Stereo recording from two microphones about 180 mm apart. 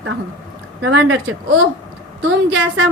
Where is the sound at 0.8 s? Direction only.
90° right.